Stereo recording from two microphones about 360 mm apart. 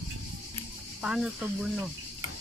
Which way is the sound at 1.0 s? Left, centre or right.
Centre.